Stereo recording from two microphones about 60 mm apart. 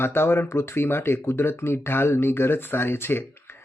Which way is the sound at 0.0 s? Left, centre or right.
Left.